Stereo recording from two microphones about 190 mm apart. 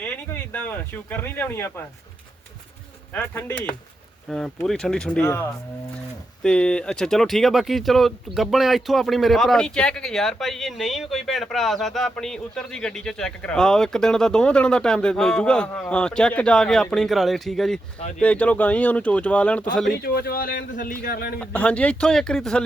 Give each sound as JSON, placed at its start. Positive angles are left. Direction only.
{"t": 0.0, "sound": "speech", "side_deg": 10}
{"t": 3.1, "sound": "speech", "side_deg": 10}
{"t": 20.0, "sound": "speech", "side_deg": 50}
{"t": 21.4, "sound": "speech", "side_deg": 5}